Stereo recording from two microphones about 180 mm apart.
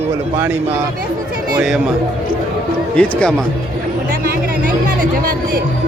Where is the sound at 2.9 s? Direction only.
5° left (ahead or behind).